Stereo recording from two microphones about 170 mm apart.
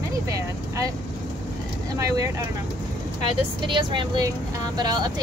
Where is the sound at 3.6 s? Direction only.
30° right (ahead or behind).